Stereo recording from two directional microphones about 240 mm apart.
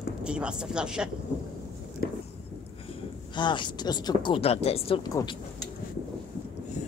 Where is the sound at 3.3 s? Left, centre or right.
Centre.